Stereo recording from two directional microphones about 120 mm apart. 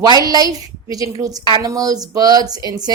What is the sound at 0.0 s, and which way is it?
A woman's voice, 35° right (ahead or behind).